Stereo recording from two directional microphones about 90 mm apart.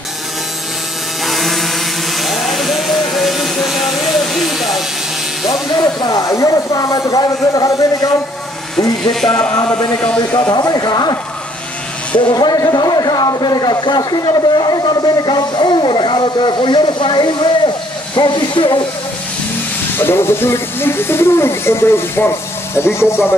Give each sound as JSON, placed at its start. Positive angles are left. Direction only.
{"t": 1.2, "sound": "a sound", "side_deg": 0}
{"t": 5.5, "sound": "speech", "side_deg": 45}
{"t": 9.9, "sound": "speech", "side_deg": 15}
{"t": 10.5, "sound": "speech", "side_deg": 45}
{"t": 12.2, "sound": "speech", "side_deg": 55}
{"t": 20.0, "sound": "speech", "side_deg": 25}